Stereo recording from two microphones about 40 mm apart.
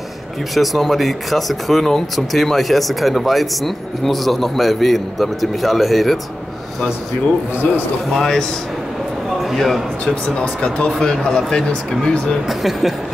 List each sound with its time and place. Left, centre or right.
0.6 s speech: centre
8.1 s speech: centre
9.4 s speech: centre
10.0 s speech: left
10.9 s speech: centre
12.4 s speech: centre